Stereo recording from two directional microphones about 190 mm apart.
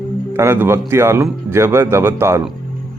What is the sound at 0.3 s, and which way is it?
Speech, 15° right (ahead or behind).